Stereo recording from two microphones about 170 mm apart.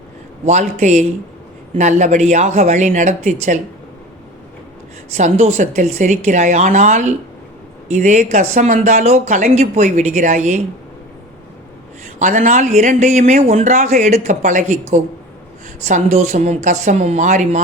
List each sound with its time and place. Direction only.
0.4 s speech: 45° right (ahead or behind)
5.1 s speech: 40° right (ahead or behind)
12.2 s speech: 45° right (ahead or behind)